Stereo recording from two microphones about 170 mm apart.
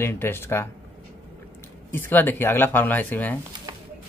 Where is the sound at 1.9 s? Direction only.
10° left (ahead or behind).